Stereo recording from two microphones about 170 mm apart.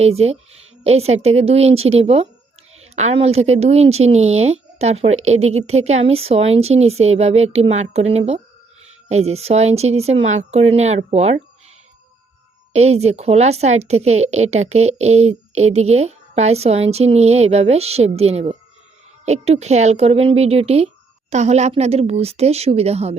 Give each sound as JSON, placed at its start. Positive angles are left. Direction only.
{"t": 0.0, "sound": "a woman's voice", "side_deg": -35}
{"t": 12.7, "sound": "a woman's voice", "side_deg": -40}